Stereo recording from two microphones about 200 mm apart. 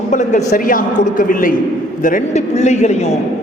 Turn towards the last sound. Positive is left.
turn(degrees=35)  # may be behind; listen again after turning